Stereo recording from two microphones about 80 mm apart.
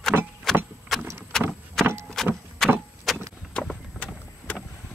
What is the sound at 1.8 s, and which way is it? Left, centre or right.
Vehicle, right.